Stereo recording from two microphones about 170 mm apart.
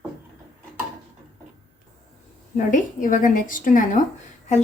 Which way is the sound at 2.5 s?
50° left (ahead or behind).